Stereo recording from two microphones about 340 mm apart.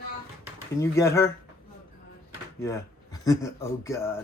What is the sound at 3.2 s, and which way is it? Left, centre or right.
Speech, centre.